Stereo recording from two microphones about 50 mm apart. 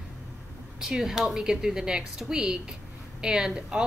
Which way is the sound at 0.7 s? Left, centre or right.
Centre.